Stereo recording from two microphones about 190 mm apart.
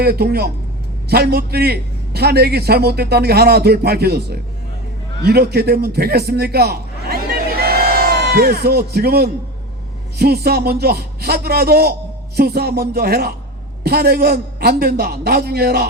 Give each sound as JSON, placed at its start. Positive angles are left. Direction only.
{"t": 0.0, "sound": "a man's voice", "side_deg": -55}